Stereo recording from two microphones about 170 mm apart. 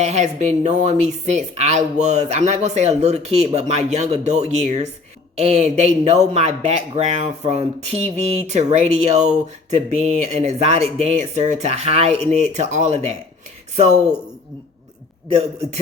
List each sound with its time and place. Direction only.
0.0 s speech: 40° right (ahead or behind)